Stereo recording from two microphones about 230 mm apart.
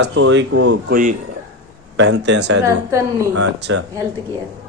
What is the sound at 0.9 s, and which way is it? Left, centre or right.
Speech, right.